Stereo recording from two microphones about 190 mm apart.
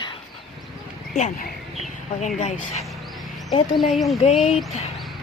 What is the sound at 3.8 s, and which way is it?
Speech, centre (ahead or behind).